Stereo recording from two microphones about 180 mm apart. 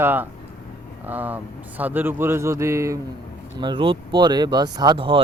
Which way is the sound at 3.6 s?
25° right (ahead or behind).